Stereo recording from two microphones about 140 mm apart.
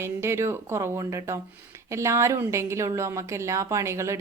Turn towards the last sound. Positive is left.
turn(degrees=-20)  # may be behind; listen again after turning